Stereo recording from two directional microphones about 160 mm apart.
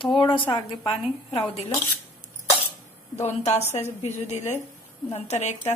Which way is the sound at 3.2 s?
45° left (ahead or behind).